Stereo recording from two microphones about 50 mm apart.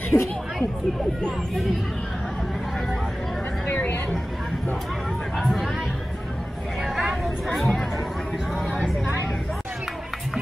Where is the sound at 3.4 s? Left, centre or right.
Left.